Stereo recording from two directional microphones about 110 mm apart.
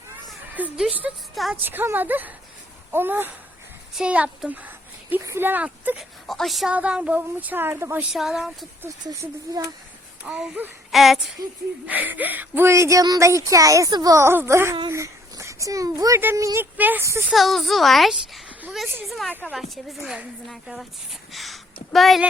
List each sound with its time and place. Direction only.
0.5 s a woman's voice: 10° right (ahead or behind)
6.0 s a woman's voice: centre (ahead or behind); by 8.0 s 20° right (ahead or behind)
8.1 s a child's voice: 5° right (ahead or behind)
9.0 s speech: 30° right (ahead or behind)
10.2 s speech: 10° right (ahead or behind)
10.9 s a child's voice: centre (ahead or behind)
11.9 s a woman's voice: 15° right (ahead or behind)
16.7 s speech: 15° right (ahead or behind)
17.3 s a child's voice: centre (ahead or behind)